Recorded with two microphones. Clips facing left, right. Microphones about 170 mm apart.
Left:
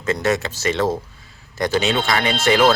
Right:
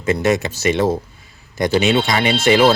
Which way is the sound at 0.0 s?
15° right (ahead or behind).